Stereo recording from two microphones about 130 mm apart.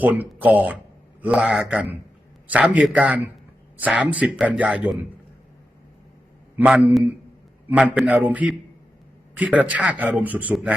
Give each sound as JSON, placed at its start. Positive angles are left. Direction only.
{"t": 0.0, "sound": "a man's voice", "side_deg": -10}
{"t": 6.6, "sound": "a man's voice", "side_deg": -10}